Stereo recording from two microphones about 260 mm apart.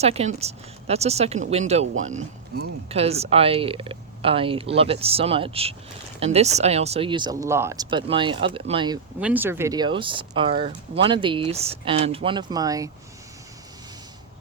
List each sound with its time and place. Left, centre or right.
0.0 s speech: right
9.2 s speech: centre